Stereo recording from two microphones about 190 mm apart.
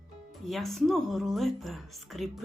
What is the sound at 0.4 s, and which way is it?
A woman's voice, centre (ahead or behind).